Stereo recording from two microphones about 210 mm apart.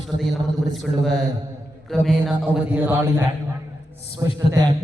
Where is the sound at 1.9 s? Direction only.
Centre (ahead or behind).